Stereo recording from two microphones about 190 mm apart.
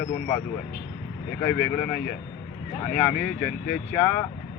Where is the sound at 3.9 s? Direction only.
10° left (ahead or behind).